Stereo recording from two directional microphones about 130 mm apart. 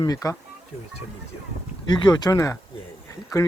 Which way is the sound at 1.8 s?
35° left (ahead or behind).